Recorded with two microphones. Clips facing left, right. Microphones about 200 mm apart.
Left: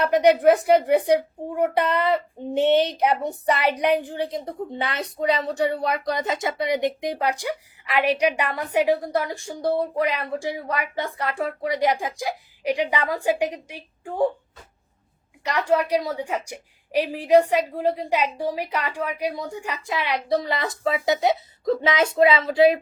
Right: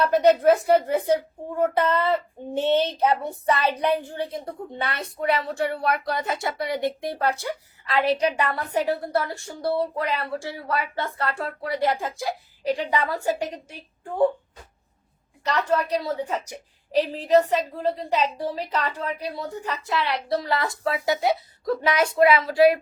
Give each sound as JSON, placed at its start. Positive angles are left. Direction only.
{"t": 0.0, "sound": "a woman's voice", "side_deg": 15}
{"t": 15.4, "sound": "a woman's voice", "side_deg": 10}